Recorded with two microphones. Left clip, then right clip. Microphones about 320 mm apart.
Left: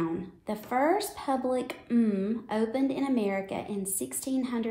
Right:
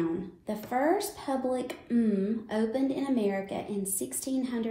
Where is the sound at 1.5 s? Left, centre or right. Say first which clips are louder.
Left 1 dB; centre.